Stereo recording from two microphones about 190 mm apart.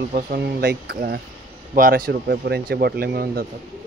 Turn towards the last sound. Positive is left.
turn(degrees=-55)  # may be behind; listen again after turning